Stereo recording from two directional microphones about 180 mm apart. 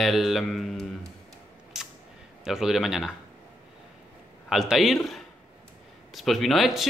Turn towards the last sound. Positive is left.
turn(degrees=0)  # may be behind; listen again after turning